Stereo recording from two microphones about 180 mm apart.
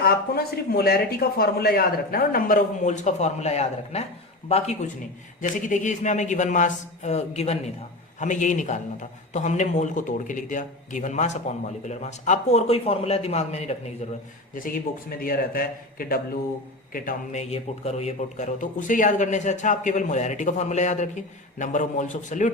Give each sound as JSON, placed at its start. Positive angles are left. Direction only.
{"t": 0.0, "sound": "a man's voice", "side_deg": 60}
{"t": 14.5, "sound": "speech", "side_deg": 50}
{"t": 17.5, "sound": "speech", "side_deg": 35}